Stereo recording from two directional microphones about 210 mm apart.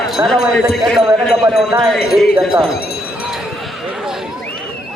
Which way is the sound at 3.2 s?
Centre (ahead or behind).